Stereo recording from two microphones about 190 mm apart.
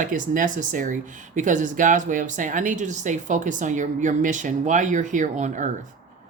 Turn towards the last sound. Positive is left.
turn(degrees=-40)  # may be behind; listen again after turning